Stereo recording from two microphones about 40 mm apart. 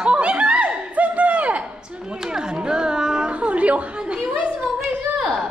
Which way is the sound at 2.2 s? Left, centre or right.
Centre.